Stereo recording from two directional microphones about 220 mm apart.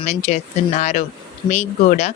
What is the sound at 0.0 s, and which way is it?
Speech, 30° left (ahead or behind).